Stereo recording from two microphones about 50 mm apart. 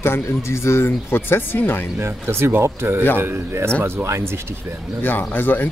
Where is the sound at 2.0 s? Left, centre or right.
Right.